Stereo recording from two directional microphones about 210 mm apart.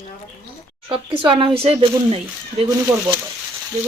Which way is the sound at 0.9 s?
25° right (ahead or behind).